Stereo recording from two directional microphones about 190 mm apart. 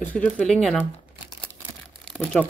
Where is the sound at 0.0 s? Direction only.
5° left (ahead or behind).